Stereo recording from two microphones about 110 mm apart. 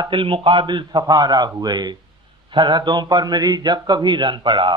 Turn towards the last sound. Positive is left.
turn(degrees=-45)  # may be behind; listen again after turning